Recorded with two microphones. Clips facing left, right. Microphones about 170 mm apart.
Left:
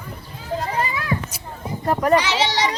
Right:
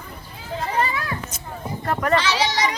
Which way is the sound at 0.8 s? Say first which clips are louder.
Left 2 dB; 10° left (ahead or behind).